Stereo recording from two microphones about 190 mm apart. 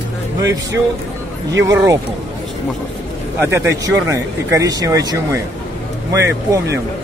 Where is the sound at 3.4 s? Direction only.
15° right (ahead or behind).